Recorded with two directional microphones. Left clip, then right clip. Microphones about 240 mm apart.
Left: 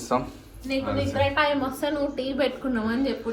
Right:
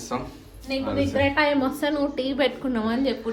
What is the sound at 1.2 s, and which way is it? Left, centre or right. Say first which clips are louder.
A woman's voice: right 1 dB; right.